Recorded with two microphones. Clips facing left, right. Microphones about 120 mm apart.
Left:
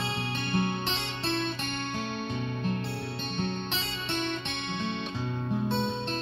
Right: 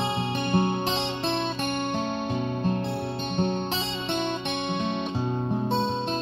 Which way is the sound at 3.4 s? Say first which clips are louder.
Right 7 dB; 40° right (ahead or behind).